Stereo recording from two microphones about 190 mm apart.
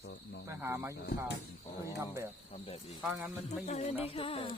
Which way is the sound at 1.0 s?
60° left (ahead or behind).